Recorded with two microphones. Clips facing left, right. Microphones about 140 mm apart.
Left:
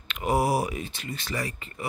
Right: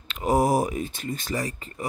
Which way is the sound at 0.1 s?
40° right (ahead or behind).